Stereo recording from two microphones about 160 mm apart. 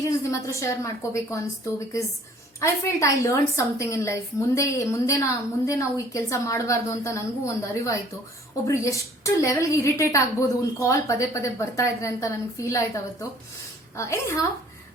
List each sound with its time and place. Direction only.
0.0 s a woman's voice: 20° left (ahead or behind)